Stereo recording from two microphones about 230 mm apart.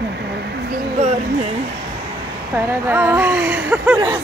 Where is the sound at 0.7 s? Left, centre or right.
Right.